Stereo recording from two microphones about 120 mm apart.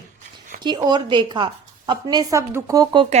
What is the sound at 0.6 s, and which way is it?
Speech, 40° right (ahead or behind).